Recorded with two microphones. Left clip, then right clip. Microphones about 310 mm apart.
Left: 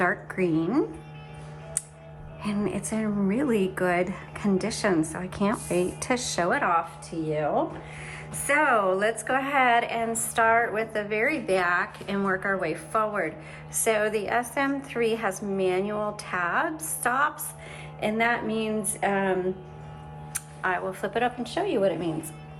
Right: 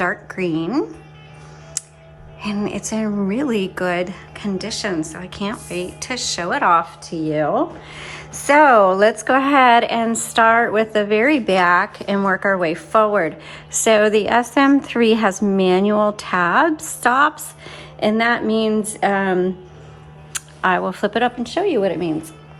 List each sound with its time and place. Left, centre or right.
0.0 s a woman's voice: centre
2.4 s a woman's voice: centre
7.3 s speech: right